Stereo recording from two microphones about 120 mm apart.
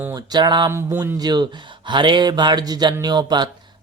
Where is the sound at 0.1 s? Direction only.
35° right (ahead or behind).